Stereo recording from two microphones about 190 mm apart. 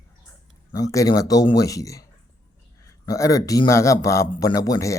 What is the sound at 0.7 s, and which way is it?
A man's voice, 20° left (ahead or behind).